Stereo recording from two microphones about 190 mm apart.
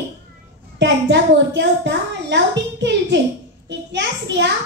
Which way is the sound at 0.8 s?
65° right (ahead or behind).